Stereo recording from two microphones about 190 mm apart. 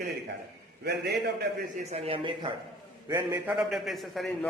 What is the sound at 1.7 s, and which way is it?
Speech, 35° right (ahead or behind).